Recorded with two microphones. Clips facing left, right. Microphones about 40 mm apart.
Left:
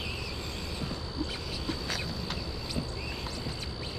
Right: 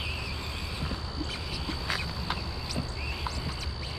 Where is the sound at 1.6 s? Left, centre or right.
Centre.